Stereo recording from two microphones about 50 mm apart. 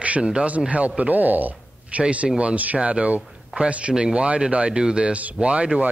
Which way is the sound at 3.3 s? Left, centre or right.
Centre.